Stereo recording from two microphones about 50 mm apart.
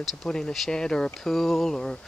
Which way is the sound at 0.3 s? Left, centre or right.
Centre.